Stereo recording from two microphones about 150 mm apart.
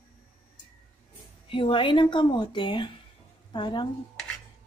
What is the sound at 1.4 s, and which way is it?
A woman's voice, 35° left (ahead or behind).